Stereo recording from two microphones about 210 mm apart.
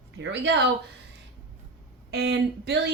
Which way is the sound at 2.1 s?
50° right (ahead or behind).